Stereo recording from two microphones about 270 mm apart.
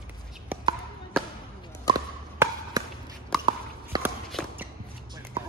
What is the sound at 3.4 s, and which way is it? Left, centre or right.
Biting, centre.